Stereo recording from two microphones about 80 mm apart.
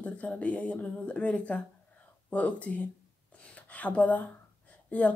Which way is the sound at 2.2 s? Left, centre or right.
Centre.